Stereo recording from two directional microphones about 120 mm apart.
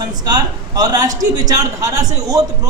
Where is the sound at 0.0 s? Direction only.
35° right (ahead or behind).